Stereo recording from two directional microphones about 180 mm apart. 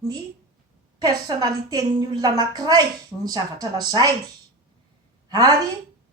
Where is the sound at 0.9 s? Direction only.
20° right (ahead or behind).